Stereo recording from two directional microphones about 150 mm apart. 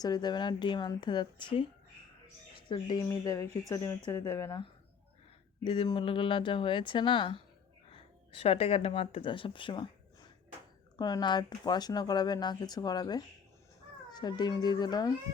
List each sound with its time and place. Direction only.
0.0 s speech: 25° left (ahead or behind)
2.6 s speech: 30° left (ahead or behind)
5.6 s speech: 35° left (ahead or behind)
10.9 s speech: 30° left (ahead or behind)